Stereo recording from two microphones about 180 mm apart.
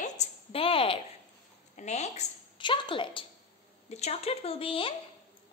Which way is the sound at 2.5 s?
25° left (ahead or behind).